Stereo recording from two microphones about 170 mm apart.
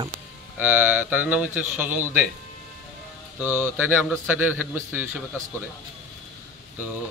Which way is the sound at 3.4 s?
10° right (ahead or behind).